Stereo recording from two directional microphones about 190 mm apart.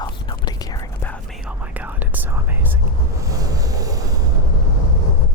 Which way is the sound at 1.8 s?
10° right (ahead or behind).